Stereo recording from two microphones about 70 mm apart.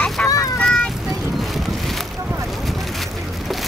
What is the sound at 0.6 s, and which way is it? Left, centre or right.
Boat, centre.